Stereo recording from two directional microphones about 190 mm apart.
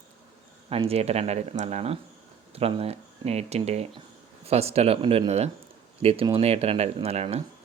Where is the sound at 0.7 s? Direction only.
30° right (ahead or behind).